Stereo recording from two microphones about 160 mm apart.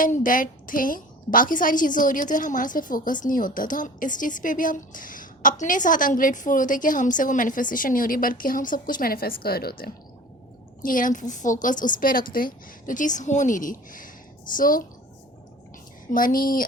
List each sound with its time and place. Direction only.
0.0 s a woman's voice: 55° left (ahead or behind); by 9.9 s 70° left (ahead or behind)
10.8 s a woman's voice: 55° left (ahead or behind)
16.1 s a woman's voice: 60° left (ahead or behind)